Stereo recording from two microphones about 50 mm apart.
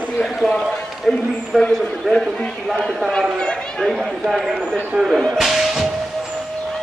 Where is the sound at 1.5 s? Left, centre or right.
Centre.